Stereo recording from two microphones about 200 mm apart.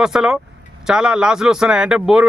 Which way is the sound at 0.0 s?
5° right (ahead or behind).